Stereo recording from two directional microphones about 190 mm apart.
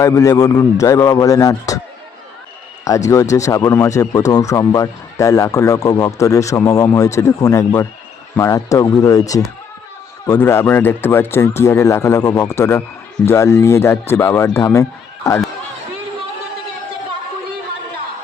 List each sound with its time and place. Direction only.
0.0 s speech: 15° left (ahead or behind)
2.8 s speech: 15° left (ahead or behind)